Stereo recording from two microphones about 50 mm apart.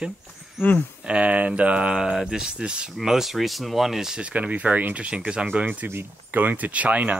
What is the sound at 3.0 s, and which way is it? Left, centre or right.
Speech, centre.